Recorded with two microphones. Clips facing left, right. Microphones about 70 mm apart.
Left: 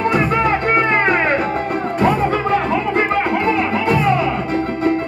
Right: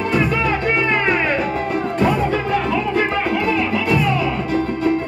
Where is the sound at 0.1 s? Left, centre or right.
Left.